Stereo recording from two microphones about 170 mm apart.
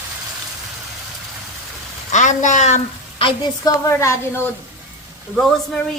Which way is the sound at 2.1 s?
45° left (ahead or behind).